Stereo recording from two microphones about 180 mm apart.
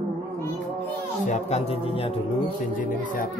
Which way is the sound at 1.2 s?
40° left (ahead or behind).